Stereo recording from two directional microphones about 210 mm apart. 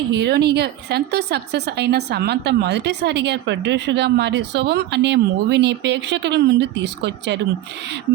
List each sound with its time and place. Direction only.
0.1 s a woman's voice: 50° right (ahead or behind)